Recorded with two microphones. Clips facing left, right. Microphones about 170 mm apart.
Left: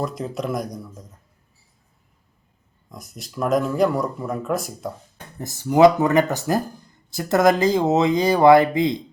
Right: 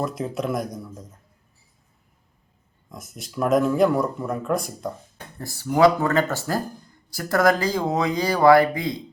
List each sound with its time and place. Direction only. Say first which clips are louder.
0.0 s speech: even; centre (ahead or behind)
2.9 s speech: right 1 dB; centre (ahead or behind)
5.4 s speech: left 4 dB; 20° left (ahead or behind)